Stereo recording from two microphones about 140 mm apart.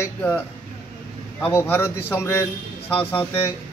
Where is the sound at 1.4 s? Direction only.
20° left (ahead or behind).